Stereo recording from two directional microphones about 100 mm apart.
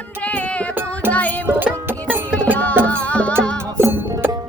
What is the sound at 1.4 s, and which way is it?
Music, 20° right (ahead or behind).